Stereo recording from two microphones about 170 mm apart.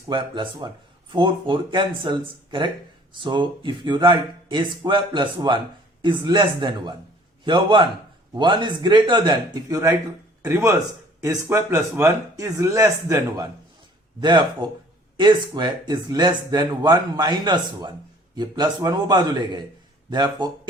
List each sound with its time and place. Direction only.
0.1 s speech: 25° right (ahead or behind)